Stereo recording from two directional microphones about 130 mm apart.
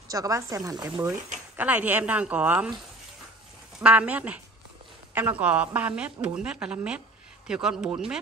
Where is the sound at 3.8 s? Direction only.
10° right (ahead or behind).